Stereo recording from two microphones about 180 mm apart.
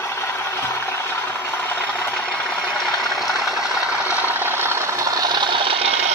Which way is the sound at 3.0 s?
Centre (ahead or behind).